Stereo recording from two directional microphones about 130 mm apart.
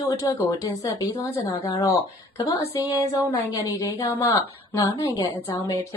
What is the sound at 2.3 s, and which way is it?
Speech, 30° left (ahead or behind).